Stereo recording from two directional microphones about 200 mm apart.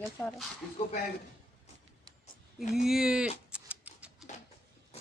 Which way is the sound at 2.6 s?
Centre (ahead or behind).